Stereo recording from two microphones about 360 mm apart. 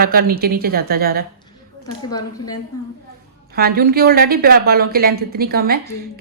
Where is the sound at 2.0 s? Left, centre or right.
Centre.